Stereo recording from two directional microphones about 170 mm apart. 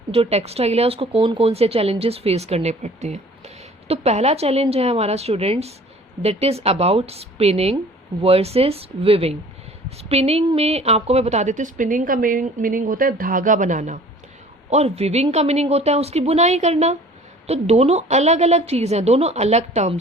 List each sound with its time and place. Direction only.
0.1 s a woman's voice: 35° right (ahead or behind)